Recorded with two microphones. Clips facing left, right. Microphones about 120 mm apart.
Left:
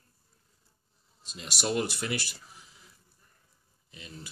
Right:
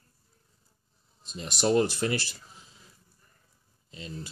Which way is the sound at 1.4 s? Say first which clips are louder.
Right 6 dB; 35° right (ahead or behind).